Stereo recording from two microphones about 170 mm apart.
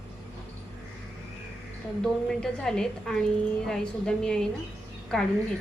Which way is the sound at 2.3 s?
5° left (ahead or behind).